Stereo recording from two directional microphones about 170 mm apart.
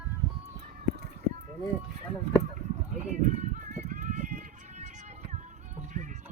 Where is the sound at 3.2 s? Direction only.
50° right (ahead or behind).